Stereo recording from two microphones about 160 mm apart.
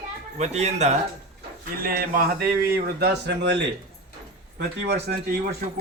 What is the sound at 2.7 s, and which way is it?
Speech, 90° right.